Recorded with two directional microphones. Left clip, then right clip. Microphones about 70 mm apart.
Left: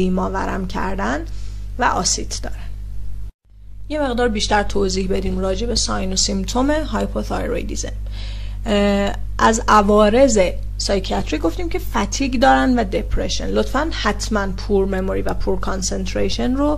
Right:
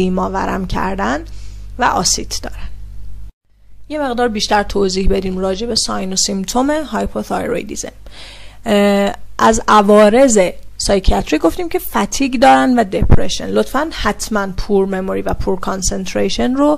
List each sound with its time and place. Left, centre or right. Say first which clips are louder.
0.0 s speech: right 4 dB; right
3.9 s speech: right 3 dB; right